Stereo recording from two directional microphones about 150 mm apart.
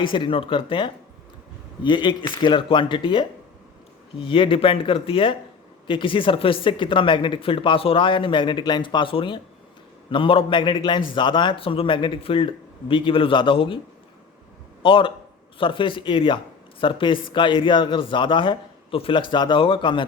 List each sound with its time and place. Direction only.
0.0 s a man's voice: 35° left (ahead or behind)
14.8 s a man's voice: 35° left (ahead or behind)